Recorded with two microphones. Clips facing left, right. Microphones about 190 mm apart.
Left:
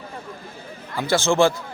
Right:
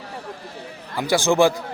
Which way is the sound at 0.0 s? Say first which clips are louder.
Right 2 dB; 75° right (ahead or behind).